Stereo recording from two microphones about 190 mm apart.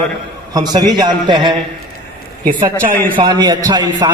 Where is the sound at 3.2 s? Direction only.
20° right (ahead or behind).